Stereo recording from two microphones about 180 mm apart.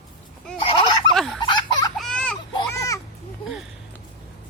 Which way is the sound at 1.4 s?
25° left (ahead or behind).